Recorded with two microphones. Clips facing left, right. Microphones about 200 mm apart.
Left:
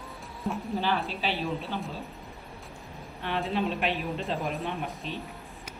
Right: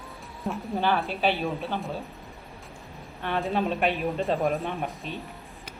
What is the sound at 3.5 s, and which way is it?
Speech, 50° right (ahead or behind).